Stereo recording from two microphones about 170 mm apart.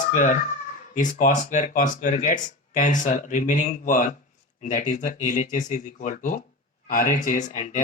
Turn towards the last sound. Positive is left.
turn(degrees=50)  # may be behind; listen again after turning